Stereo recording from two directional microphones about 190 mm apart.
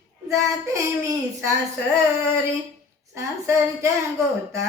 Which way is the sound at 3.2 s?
15° right (ahead or behind).